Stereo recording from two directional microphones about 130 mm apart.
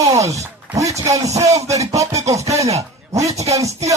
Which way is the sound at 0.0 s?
25° right (ahead or behind).